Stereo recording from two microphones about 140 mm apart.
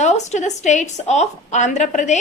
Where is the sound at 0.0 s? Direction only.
55° left (ahead or behind).